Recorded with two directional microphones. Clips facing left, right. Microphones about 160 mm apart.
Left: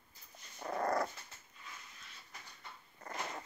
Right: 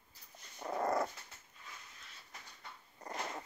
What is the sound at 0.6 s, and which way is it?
Dog, 5° right (ahead or behind).